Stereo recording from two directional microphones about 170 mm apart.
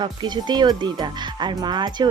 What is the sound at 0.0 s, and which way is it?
Speech, 25° right (ahead or behind).